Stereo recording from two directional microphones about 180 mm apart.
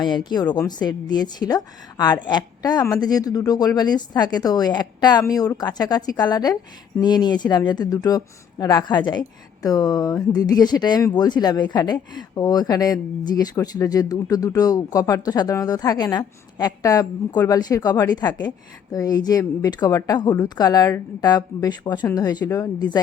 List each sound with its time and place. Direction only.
0.0 s speech: 25° left (ahead or behind)